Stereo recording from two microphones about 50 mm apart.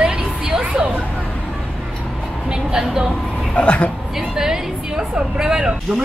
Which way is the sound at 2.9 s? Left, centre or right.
Centre.